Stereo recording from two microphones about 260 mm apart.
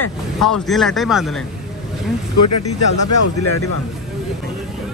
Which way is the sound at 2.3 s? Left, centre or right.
Left.